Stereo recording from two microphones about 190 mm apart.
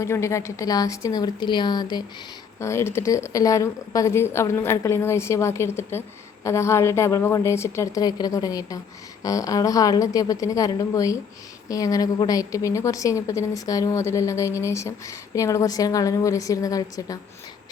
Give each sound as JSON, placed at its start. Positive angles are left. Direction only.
{"t": 0.0, "sound": "a woman's voice", "side_deg": 15}